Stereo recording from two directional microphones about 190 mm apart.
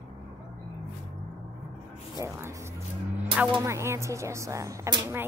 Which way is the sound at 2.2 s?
15° right (ahead or behind).